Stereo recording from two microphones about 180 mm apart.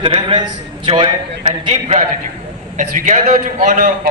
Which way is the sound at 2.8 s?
45° right (ahead or behind).